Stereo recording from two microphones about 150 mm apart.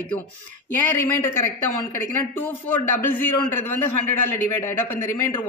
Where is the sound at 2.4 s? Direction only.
15° left (ahead or behind).